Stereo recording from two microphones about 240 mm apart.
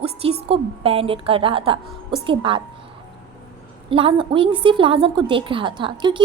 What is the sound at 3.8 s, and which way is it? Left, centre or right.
A woman's voice, right.